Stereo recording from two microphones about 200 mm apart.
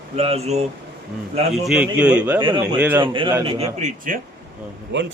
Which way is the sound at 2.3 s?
25° right (ahead or behind).